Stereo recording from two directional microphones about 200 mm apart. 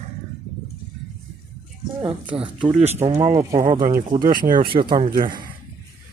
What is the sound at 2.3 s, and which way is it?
Speech, 5° right (ahead or behind).